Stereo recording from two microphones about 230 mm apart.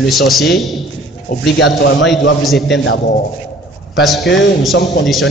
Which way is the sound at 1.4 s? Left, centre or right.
Left.